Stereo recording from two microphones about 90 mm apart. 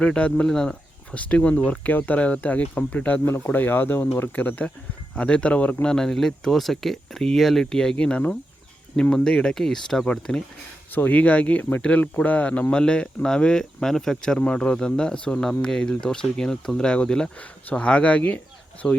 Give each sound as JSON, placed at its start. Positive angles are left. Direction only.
{"t": 0.0, "sound": "speech", "side_deg": 10}
{"t": 3.2, "sound": "speech", "side_deg": 30}